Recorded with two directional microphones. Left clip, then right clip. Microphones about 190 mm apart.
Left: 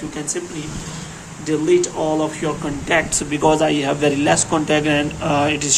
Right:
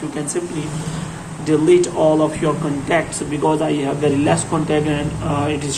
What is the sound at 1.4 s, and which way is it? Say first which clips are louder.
Speech: right 3 dB; 5° left (ahead or behind).